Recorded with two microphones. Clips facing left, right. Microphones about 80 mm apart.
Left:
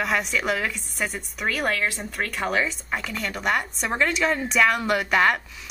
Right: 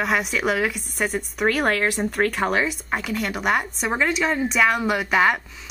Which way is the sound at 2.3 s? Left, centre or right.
Centre.